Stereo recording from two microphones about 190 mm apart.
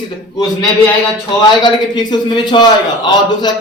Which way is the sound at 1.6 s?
20° left (ahead or behind).